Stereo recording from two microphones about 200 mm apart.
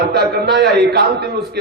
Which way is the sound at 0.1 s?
55° right (ahead or behind).